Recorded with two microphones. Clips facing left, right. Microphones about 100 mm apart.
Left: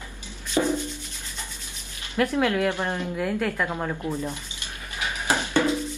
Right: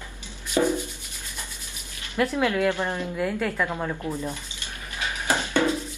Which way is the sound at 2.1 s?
15° left (ahead or behind).